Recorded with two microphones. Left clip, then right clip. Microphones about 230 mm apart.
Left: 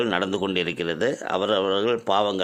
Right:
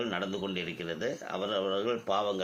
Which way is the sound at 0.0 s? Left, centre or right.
Left.